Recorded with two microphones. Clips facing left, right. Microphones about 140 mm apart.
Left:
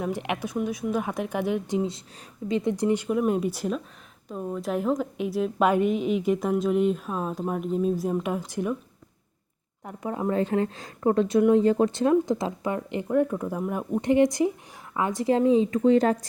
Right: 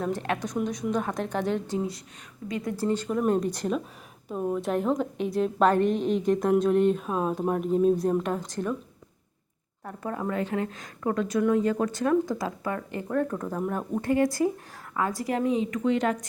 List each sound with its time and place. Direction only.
0.0 s a woman's voice: 15° left (ahead or behind)
4.3 s a woman's voice: 5° right (ahead or behind); by 8.7 s 10° left (ahead or behind)
9.8 s a woman's voice: 15° left (ahead or behind)
10.2 s speech: 30° left (ahead or behind); by 14.0 s 10° left (ahead or behind)
14.0 s speech: 20° left (ahead or behind); by 16.1 s 35° left (ahead or behind)